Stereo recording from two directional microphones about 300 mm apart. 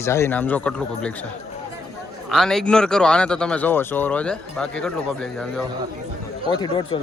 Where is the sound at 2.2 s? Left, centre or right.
Centre.